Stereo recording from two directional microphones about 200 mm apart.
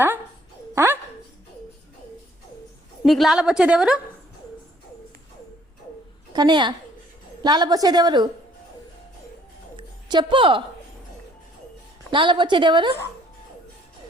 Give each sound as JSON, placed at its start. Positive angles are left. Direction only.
{"t": 0.8, "sound": "speech", "side_deg": -10}
{"t": 3.1, "sound": "a woman's voice", "side_deg": 0}
{"t": 6.3, "sound": "a woman's voice", "side_deg": -20}
{"t": 9.7, "sound": "a sound", "side_deg": -25}
{"t": 12.1, "sound": "a woman's voice", "side_deg": -25}